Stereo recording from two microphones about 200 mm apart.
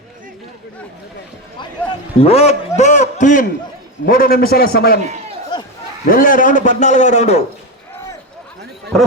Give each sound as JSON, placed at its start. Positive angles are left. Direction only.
{"t": 2.2, "sound": "a man's voice", "side_deg": 30}
{"t": 5.5, "sound": "a sound", "side_deg": 20}
{"t": 6.1, "sound": "a man's voice", "side_deg": 45}
{"t": 8.9, "sound": "speech", "side_deg": 0}